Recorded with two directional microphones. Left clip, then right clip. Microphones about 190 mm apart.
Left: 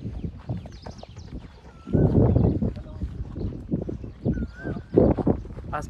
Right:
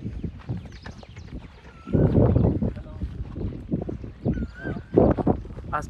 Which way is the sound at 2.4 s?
Centre (ahead or behind).